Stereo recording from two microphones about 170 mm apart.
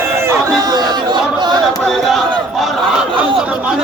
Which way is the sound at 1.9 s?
Centre (ahead or behind).